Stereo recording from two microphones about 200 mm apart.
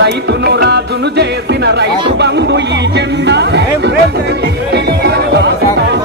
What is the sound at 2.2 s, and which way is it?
Speech, 60° right (ahead or behind).